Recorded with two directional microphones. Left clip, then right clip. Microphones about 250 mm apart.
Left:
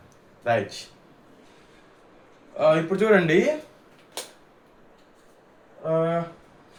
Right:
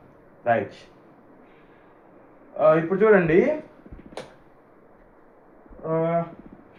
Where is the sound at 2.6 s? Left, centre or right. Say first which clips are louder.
Right 2 dB; left.